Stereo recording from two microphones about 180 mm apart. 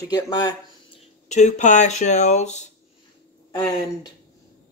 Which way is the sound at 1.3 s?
40° left (ahead or behind).